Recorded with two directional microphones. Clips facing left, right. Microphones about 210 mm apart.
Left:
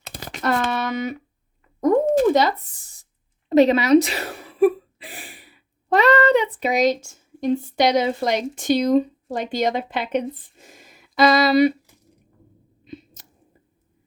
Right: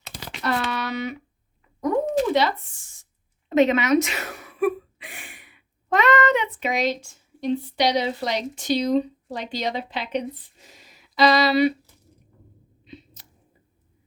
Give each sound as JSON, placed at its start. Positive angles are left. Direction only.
{"t": 0.0, "sound": "a sound", "side_deg": 45}
{"t": 3.5, "sound": "a woman's voice", "side_deg": 35}
{"t": 12.8, "sound": "squish", "side_deg": 45}